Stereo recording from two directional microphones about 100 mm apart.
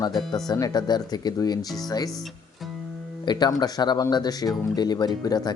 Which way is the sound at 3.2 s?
45° left (ahead or behind).